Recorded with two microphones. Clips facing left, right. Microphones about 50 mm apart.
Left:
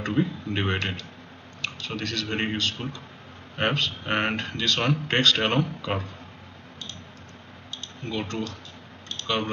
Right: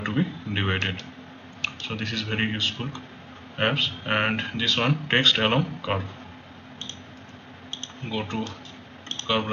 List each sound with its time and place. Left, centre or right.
0.0 s speech: centre
8.1 s speech: centre